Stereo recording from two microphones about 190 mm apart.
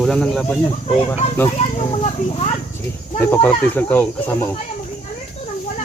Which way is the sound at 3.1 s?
10° left (ahead or behind).